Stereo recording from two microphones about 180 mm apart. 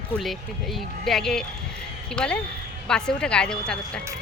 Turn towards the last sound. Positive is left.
turn(degrees=5)  # may be behind; listen again after turning